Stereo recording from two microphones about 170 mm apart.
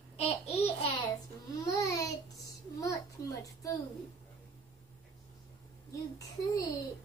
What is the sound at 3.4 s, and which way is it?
Speech, 20° left (ahead or behind).